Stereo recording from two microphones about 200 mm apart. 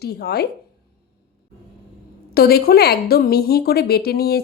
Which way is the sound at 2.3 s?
50° left (ahead or behind).